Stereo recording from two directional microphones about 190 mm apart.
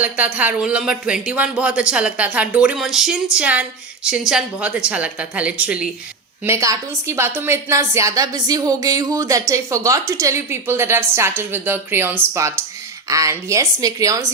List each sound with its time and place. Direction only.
0.0 s a woman's voice: 10° right (ahead or behind)